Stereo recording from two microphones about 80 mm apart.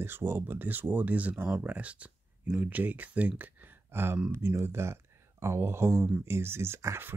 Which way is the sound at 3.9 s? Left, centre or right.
Right.